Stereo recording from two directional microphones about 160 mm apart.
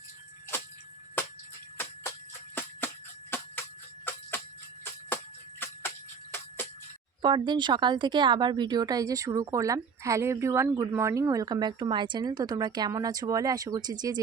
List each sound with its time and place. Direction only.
2.6 s jingle bell: 15° left (ahead or behind)
5.0 s music: 15° left (ahead or behind)
7.2 s speech: 30° right (ahead or behind)